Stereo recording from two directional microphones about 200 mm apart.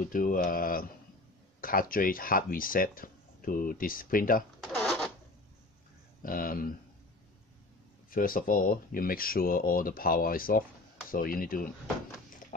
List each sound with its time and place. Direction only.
0.0 s speech: 45° left (ahead or behind)
4.7 s a sound: centre (ahead or behind)
6.2 s speech: 45° left (ahead or behind)
8.1 s speech: 45° left (ahead or behind)